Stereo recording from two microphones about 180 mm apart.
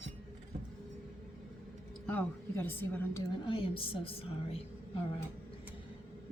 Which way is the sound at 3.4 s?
30° left (ahead or behind).